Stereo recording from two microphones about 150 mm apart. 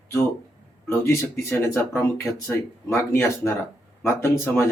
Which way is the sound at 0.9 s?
20° left (ahead or behind).